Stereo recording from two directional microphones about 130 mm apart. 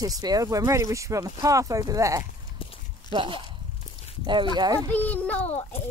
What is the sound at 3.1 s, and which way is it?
Speech, 40° right (ahead or behind).